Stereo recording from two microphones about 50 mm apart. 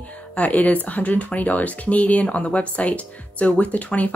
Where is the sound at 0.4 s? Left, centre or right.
Left.